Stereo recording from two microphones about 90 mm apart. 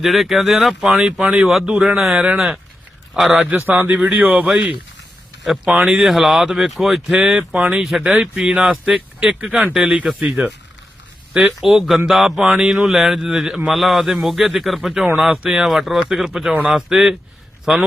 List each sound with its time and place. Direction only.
0.0 s speech: centre (ahead or behind)
1.7 s speech: 15° right (ahead or behind)
2.0 s speech: centre (ahead or behind)